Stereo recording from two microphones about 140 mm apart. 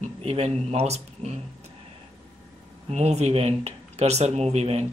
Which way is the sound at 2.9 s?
50° right (ahead or behind).